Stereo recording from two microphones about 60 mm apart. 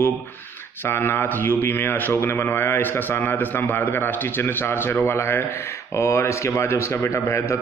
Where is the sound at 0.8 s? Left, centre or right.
Left.